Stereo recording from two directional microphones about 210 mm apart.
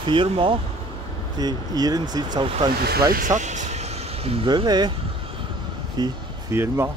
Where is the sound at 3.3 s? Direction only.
35° right (ahead or behind).